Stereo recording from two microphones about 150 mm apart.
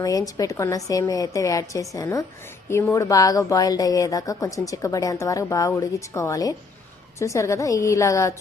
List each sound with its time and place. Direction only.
0.0 s a woman's voice: 25° left (ahead or behind)